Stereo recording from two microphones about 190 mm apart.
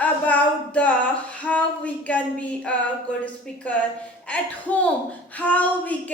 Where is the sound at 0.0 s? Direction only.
10° left (ahead or behind).